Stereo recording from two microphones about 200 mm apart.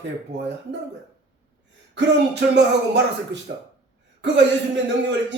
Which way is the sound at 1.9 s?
60° right (ahead or behind).